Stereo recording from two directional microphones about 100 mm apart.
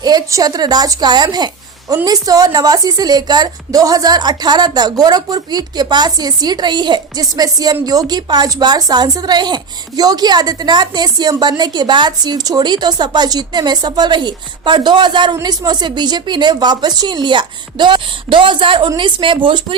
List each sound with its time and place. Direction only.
0.0 s a woman's voice: 40° right (ahead or behind)